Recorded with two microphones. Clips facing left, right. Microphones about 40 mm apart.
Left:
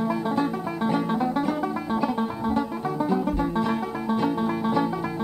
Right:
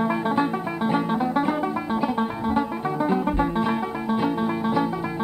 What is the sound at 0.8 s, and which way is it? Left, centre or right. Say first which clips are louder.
Music: right 1 dB; centre.